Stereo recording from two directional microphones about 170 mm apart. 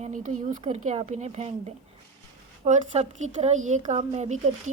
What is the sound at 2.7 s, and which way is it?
Speech, 40° right (ahead or behind).